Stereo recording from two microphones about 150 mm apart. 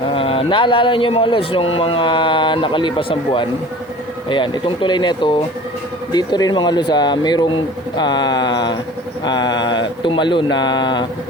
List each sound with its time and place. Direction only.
0.1 s speech: 35° left (ahead or behind)